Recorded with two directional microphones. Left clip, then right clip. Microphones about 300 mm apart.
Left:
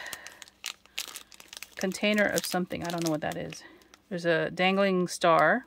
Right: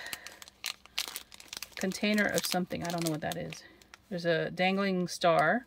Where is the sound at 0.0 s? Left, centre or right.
Centre.